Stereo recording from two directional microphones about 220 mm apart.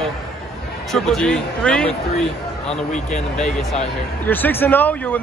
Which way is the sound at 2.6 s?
30° left (ahead or behind).